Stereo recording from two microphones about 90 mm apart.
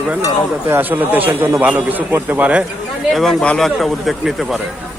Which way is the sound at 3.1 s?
5° left (ahead or behind).